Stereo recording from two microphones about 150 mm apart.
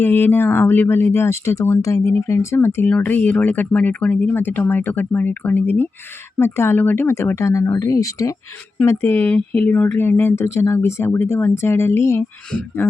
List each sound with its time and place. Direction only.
0.0 s speech: 15° left (ahead or behind)